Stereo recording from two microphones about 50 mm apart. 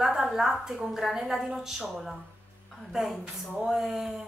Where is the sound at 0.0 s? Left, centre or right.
Centre.